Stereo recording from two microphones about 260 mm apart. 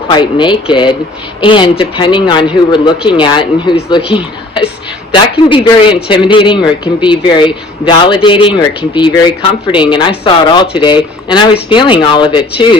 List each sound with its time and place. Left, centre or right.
0.1 s a man's voice: centre